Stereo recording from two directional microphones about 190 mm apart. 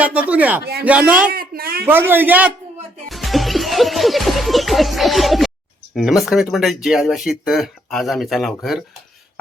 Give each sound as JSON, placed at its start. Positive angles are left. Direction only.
{"t": 0.0, "sound": "a man's voice", "side_deg": -5}
{"t": 0.6, "sound": "a man's voice", "side_deg": -55}
{"t": 0.9, "sound": "a man's voice", "side_deg": -5}
{"t": 1.3, "sound": "a sound", "side_deg": -50}
{"t": 1.9, "sound": "a man's voice", "side_deg": -10}
{"t": 3.1, "sound": "music", "side_deg": 0}
{"t": 5.9, "sound": "speech", "side_deg": 0}